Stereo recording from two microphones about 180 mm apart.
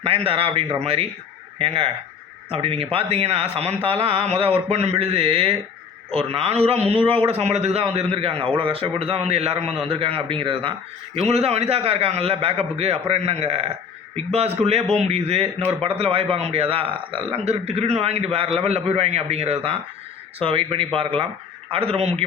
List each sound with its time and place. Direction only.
0.0 s a man's voice: 35° right (ahead or behind)